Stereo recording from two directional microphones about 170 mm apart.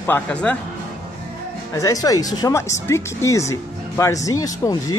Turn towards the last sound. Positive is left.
turn(degrees=20)  # may be behind; listen again after turning